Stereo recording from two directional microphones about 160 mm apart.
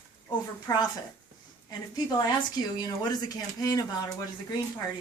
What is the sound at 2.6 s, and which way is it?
Speech, 25° left (ahead or behind).